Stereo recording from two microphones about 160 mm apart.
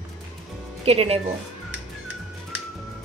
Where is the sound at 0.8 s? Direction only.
40° right (ahead or behind).